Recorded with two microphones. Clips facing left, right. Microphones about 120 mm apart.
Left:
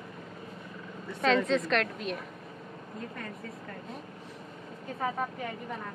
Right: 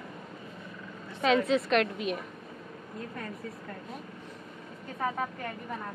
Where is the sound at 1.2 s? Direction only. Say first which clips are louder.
Right 1 dB; 5° right (ahead or behind).